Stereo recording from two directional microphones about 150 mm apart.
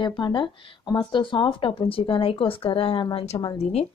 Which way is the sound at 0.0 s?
30° left (ahead or behind).